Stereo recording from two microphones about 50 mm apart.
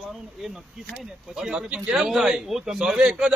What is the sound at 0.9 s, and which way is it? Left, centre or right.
A man's voice, centre.